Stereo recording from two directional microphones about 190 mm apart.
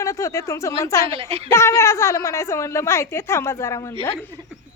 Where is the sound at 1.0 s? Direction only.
30° right (ahead or behind).